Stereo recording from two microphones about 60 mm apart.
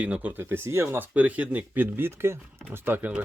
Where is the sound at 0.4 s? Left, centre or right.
Right.